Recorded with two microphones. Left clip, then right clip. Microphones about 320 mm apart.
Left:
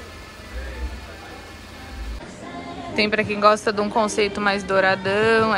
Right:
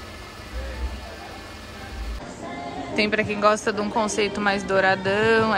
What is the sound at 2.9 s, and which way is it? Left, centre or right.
A woman's voice, centre.